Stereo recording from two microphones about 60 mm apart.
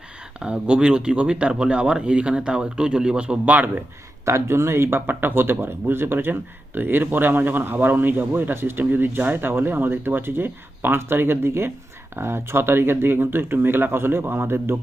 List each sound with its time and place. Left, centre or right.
0.3 s speech: centre
3.4 s a man's voice: right
4.3 s speech: right